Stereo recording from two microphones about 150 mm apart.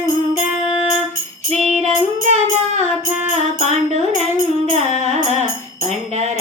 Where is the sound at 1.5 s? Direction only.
Centre (ahead or behind).